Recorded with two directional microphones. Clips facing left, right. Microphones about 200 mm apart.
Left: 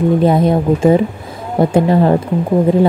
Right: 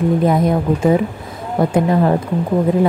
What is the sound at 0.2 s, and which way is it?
Speech, 30° left (ahead or behind).